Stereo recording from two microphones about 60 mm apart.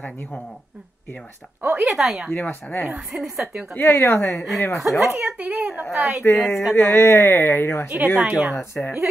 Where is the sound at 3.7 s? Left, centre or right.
Left.